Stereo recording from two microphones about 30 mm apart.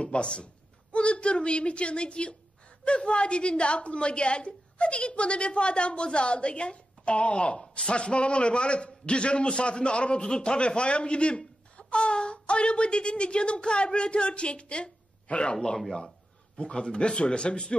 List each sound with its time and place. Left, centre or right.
0.0 s a man's voice: left
15.5 s speech: left